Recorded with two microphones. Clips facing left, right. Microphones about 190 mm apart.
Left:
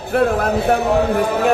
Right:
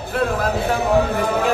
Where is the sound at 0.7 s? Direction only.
60° left (ahead or behind).